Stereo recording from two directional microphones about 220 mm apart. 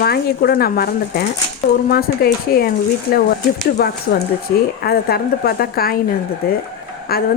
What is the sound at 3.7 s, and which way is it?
A woman's voice, 45° left (ahead or behind).